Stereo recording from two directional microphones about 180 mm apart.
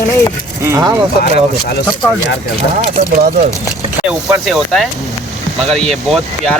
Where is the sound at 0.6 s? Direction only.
15° right (ahead or behind).